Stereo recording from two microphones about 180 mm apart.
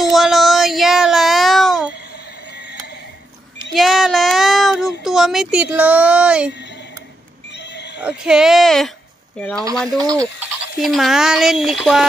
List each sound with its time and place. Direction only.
0.0 s child singing: centre (ahead or behind)
3.7 s child singing: centre (ahead or behind)
7.5 s neigh: 70° left (ahead or behind)
8.0 s speech: 5° right (ahead or behind)
9.9 s speech: 20° right (ahead or behind)
10.8 s speech: centre (ahead or behind)